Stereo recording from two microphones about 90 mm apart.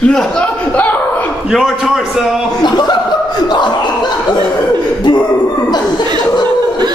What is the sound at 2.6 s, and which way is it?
Speech, 50° left (ahead or behind).